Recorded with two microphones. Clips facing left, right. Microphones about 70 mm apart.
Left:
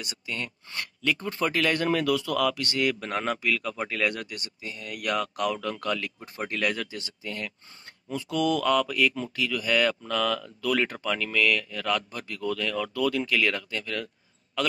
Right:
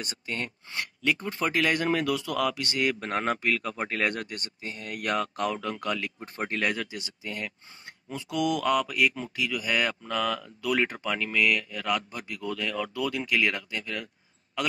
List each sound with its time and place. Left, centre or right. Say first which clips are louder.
0.0 s speech: right 1 dB; right
0.7 s speech: even; right
6.2 s speech: even; right; by 14.0 s centre